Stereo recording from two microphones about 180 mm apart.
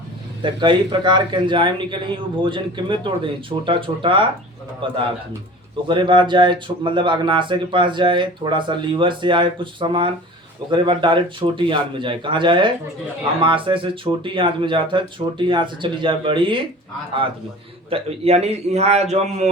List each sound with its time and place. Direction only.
0.4 s speech: 25° right (ahead or behind)
17.8 s a man's voice: 35° right (ahead or behind)